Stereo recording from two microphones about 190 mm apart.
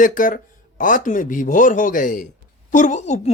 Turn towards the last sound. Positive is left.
turn(degrees=35)  # may be behind; listen again after turning